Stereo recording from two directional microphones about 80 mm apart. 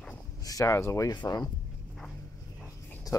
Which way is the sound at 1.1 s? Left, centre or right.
Left.